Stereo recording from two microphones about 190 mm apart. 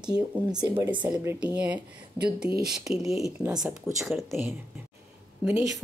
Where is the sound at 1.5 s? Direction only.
5° right (ahead or behind).